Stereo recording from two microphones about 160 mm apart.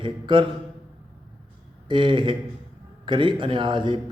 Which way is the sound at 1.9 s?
30° right (ahead or behind).